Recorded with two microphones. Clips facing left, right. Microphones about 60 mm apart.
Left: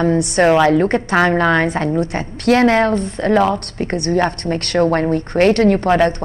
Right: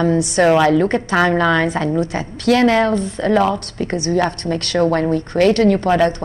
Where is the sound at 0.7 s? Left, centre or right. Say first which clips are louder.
Left 1 dB; left.